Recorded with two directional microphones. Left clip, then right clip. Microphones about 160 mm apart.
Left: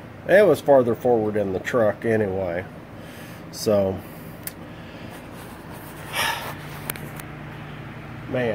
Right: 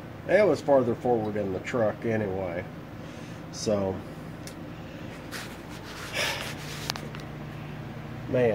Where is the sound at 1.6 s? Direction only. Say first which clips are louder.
Left 6 dB; 70° left (ahead or behind).